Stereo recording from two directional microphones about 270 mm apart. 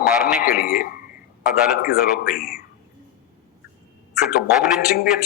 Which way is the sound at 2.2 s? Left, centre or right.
Left.